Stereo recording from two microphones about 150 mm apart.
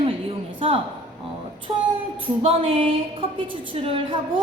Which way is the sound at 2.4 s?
40° right (ahead or behind).